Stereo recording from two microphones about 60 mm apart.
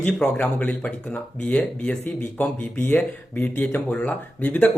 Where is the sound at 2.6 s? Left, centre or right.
Left.